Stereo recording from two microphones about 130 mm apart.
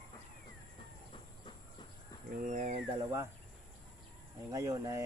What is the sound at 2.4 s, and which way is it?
Speech, 80° right.